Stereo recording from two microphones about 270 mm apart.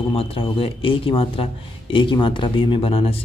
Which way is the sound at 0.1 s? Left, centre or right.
Left.